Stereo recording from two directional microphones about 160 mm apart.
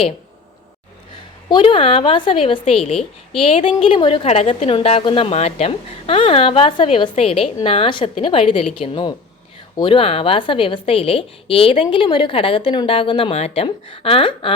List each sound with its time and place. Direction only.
1.5 s a woman's voice: 30° left (ahead or behind)